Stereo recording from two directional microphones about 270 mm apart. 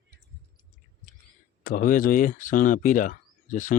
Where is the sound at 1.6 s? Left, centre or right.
Left.